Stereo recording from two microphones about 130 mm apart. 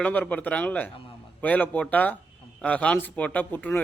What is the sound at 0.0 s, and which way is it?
Speech, 10° left (ahead or behind).